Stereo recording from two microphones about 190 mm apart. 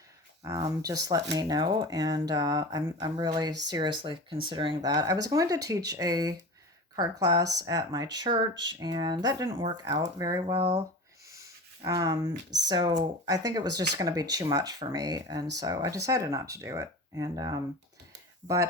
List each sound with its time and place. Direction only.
0.4 s speech: 15° right (ahead or behind)
10.5 s speech: 35° right (ahead or behind)
11.3 s speech: 15° right (ahead or behind)